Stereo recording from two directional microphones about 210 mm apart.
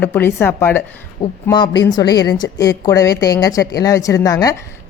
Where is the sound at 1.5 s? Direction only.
20° left (ahead or behind).